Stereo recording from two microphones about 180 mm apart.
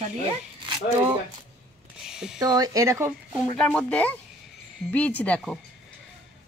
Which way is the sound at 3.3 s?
5° left (ahead or behind).